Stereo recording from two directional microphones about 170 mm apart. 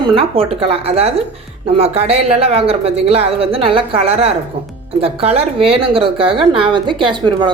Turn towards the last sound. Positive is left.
turn(degrees=-30)  # may be behind; listen again after turning